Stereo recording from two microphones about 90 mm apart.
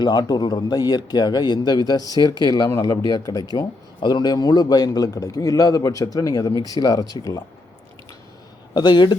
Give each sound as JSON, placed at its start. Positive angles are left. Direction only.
{"t": 0.0, "sound": "speech", "side_deg": 50}
{"t": 2.6, "sound": "a man's voice", "side_deg": 35}
{"t": 2.9, "sound": "speech", "side_deg": 45}
{"t": 8.7, "sound": "speech", "side_deg": 55}